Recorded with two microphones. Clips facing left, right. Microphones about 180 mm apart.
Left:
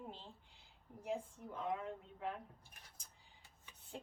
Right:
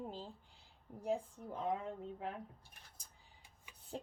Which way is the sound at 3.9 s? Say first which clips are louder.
Right 5 dB; 40° right (ahead or behind).